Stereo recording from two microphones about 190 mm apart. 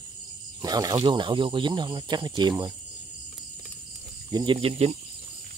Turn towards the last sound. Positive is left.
turn(degrees=-30)  # may be behind; listen again after turning